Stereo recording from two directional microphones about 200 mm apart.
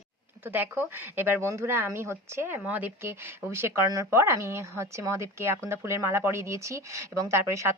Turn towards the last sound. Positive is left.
turn(degrees=-15)  # may be behind; listen again after turning